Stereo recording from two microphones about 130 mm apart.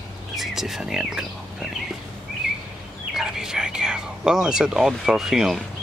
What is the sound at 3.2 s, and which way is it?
Speech, 5° right (ahead or behind).